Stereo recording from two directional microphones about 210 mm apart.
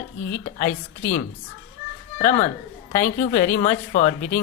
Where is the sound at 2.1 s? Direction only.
35° left (ahead or behind).